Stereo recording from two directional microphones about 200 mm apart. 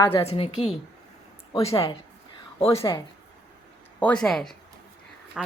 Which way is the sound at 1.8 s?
25° left (ahead or behind).